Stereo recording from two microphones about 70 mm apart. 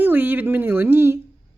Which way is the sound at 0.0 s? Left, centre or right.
Right.